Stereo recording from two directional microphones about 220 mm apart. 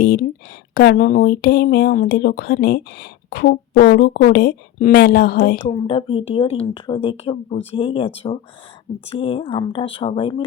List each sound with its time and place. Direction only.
0.0 s a sound: 40° left (ahead or behind)
0.7 s speech: 45° left (ahead or behind)
5.6 s speech: 25° left (ahead or behind)